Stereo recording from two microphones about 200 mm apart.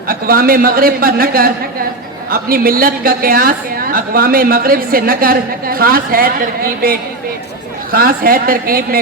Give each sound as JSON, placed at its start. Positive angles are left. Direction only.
{"t": 0.1, "sound": "a woman's voice", "side_deg": -45}